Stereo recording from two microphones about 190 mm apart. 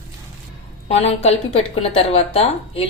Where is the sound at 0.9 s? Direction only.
35° left (ahead or behind).